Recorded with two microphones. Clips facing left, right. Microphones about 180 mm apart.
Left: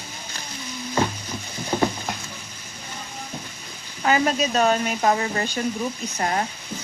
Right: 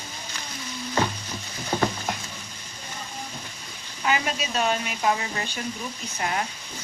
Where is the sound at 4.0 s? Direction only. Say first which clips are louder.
Left 6 dB; 40° left (ahead or behind).